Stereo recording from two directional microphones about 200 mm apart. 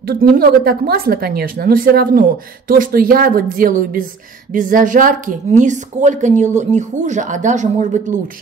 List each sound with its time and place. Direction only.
0.1 s a woman's voice: 50° right (ahead or behind)